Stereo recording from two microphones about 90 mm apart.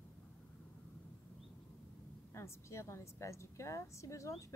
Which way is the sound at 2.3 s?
30° left (ahead or behind).